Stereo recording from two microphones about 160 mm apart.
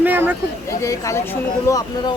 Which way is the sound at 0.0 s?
10° right (ahead or behind).